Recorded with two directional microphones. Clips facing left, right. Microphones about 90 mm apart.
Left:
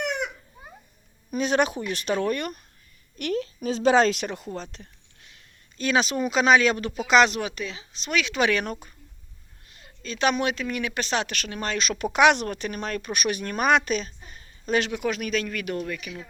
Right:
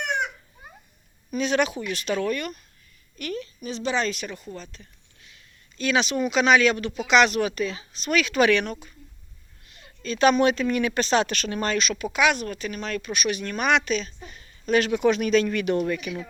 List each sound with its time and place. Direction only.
1.4 s speech: 45° left (ahead or behind)
3.2 s a woman's voice: 80° left
5.7 s speech: 35° left (ahead or behind); by 8.5 s 20° left (ahead or behind)
8.6 s speech: 35° left (ahead or behind)
10.0 s speech: 15° left (ahead or behind)
11.9 s speech: 55° left (ahead or behind); by 14.8 s 30° left (ahead or behind)
14.9 s speech: centre (ahead or behind)
15.8 s speech: 10° right (ahead or behind)